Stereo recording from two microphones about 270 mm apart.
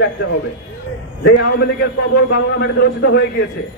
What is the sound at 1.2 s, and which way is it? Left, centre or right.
A man's voice, left.